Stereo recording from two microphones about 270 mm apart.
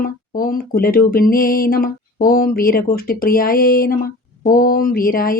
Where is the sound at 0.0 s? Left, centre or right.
Left.